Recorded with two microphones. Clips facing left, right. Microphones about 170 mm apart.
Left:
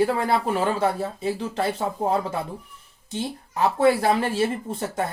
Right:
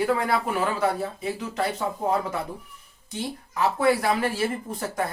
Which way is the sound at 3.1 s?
30° left (ahead or behind).